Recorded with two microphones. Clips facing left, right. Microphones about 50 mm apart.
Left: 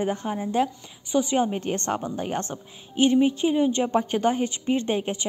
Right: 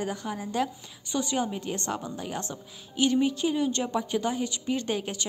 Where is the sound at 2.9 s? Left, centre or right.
Left.